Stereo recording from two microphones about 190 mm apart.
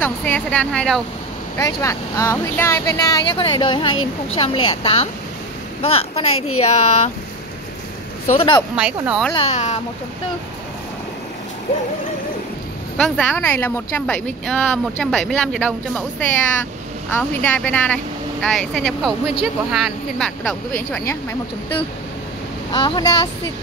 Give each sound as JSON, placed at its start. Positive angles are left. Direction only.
{"t": 0.0, "sound": "speech", "side_deg": 10}
{"t": 1.6, "sound": "speech", "side_deg": 15}
{"t": 3.9, "sound": "speech", "side_deg": 90}
{"t": 4.6, "sound": "speech", "side_deg": 30}
{"t": 8.4, "sound": "speech", "side_deg": 25}
{"t": 8.7, "sound": "speech", "side_deg": -5}
{"t": 9.3, "sound": "speech", "side_deg": 30}
{"t": 12.9, "sound": "speech", "side_deg": 5}
{"t": 22.7, "sound": "speech", "side_deg": 25}